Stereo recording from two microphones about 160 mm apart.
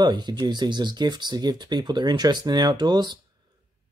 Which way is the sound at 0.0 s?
25° right (ahead or behind).